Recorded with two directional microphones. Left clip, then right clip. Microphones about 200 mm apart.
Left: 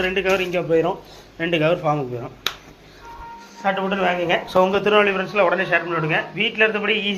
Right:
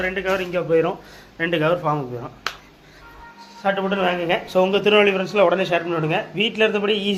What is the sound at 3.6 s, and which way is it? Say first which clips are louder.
Speech: even; 15° right (ahead or behind).